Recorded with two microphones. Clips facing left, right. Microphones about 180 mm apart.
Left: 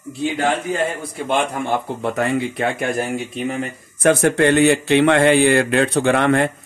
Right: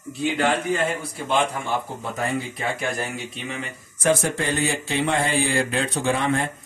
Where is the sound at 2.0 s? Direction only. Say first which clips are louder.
Left 7 dB; 65° left (ahead or behind).